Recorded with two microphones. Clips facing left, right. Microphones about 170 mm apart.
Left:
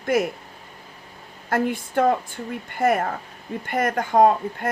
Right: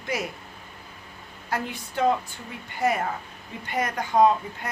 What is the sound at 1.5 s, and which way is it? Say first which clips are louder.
Speech: left 8 dB; 50° left (ahead or behind).